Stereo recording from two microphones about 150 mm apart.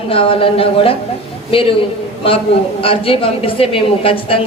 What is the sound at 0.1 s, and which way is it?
Speech, 35° left (ahead or behind).